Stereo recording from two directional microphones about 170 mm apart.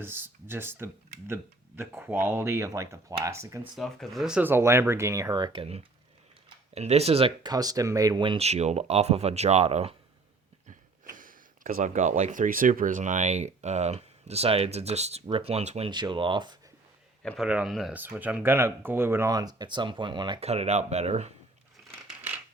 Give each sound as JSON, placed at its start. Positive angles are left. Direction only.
{"t": 0.0, "sound": "speech", "side_deg": -15}
{"t": 3.8, "sound": "speech", "side_deg": 0}
{"t": 10.7, "sound": "speech", "side_deg": -50}
{"t": 15.9, "sound": "speech", "side_deg": -25}
{"t": 17.2, "sound": "speech", "side_deg": -5}